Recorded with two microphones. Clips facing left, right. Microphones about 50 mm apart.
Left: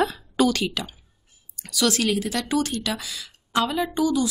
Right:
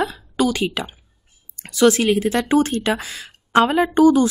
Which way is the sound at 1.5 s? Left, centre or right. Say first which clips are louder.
Right 8 dB; right.